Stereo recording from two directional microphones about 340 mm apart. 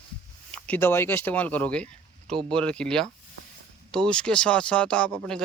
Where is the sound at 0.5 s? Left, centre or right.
Centre.